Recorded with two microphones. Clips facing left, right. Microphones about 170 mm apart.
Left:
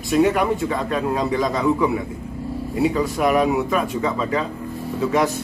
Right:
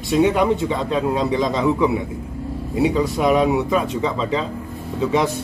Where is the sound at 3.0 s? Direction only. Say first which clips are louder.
Right 2 dB; 20° right (ahead or behind).